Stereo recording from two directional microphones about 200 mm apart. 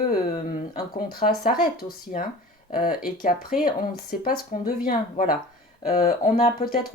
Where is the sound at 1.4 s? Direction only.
45° left (ahead or behind).